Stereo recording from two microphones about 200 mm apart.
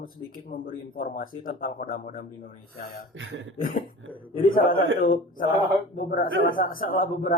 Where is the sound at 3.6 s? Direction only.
45° left (ahead or behind).